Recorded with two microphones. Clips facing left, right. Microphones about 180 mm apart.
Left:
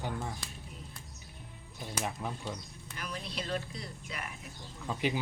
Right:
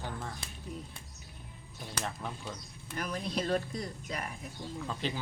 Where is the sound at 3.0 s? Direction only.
45° right (ahead or behind).